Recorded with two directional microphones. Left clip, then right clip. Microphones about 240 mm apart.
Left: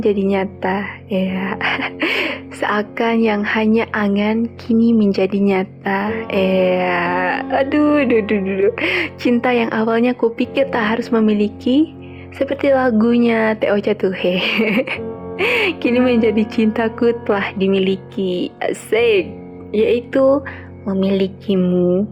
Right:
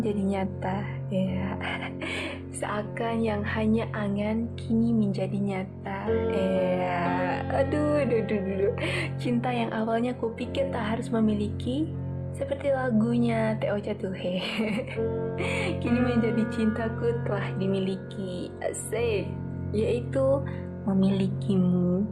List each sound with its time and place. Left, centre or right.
0.0 s speech: left